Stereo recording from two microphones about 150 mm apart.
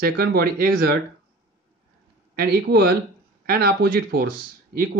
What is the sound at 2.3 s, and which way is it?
Speech, 90° right.